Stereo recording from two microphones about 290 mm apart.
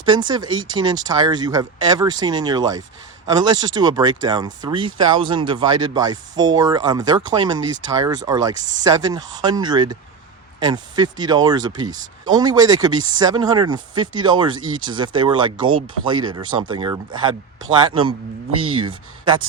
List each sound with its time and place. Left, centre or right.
0.0 s speech: centre